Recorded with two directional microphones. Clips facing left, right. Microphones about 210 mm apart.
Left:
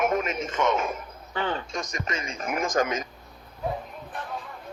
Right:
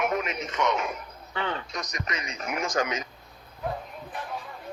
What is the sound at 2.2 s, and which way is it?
Speech, 50° left (ahead or behind).